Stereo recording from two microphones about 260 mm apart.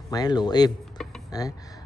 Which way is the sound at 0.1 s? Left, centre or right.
Centre.